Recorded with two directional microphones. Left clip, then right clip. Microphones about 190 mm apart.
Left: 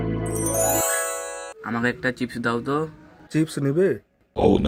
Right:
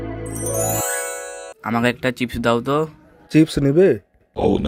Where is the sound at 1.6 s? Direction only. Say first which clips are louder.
Right 5 dB; 40° right (ahead or behind); by 4.0 s 25° right (ahead or behind).